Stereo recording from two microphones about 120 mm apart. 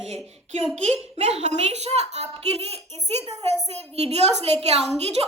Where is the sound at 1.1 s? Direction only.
65° right (ahead or behind).